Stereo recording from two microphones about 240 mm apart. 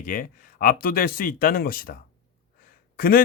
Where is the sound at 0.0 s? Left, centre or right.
Left.